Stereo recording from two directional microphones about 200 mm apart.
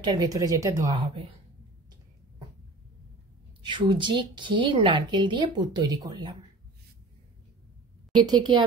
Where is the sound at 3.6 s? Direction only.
25° right (ahead or behind).